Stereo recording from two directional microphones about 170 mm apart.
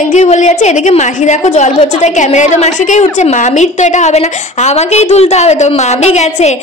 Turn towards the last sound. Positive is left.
turn(degrees=40)  # may be behind; listen again after turning